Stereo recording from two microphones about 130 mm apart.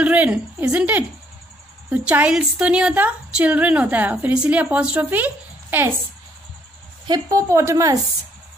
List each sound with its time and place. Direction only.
0.0 s a woman's voice: 10° right (ahead or behind)
7.1 s a woman's voice: 25° right (ahead or behind)